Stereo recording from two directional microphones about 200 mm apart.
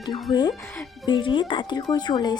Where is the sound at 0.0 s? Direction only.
20° left (ahead or behind).